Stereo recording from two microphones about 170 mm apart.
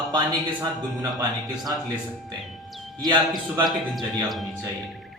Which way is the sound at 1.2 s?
25° right (ahead or behind).